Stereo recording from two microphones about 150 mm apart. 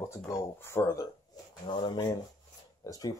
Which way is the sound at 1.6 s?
30° left (ahead or behind).